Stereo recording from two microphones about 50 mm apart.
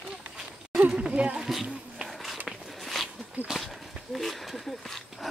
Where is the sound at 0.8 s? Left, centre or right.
Right.